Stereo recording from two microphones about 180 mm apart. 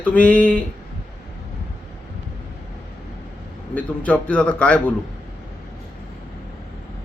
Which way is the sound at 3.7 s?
5° left (ahead or behind).